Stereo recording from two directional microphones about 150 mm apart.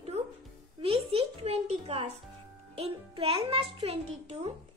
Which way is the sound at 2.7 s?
40° right (ahead or behind).